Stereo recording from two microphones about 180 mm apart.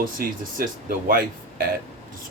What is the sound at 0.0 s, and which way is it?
Speech, 50° right (ahead or behind).